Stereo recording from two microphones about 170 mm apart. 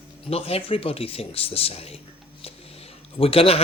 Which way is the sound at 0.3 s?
35° left (ahead or behind).